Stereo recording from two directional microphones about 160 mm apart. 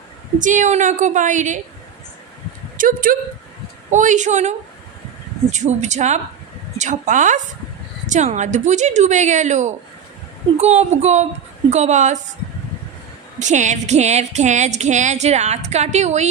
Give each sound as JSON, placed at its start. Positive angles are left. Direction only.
{"t": 0.3, "sound": "music", "side_deg": -55}
{"t": 2.7, "sound": "speech", "side_deg": -60}
{"t": 3.9, "sound": "music", "side_deg": -50}
{"t": 13.4, "sound": "music", "side_deg": -50}